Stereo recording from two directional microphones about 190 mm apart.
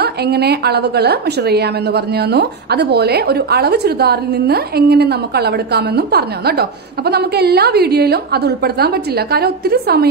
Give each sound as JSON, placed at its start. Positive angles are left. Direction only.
{"t": 0.0, "sound": "a woman's voice", "side_deg": -60}